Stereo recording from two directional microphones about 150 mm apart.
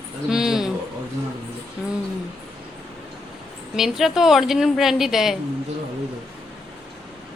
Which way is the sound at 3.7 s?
Centre (ahead or behind).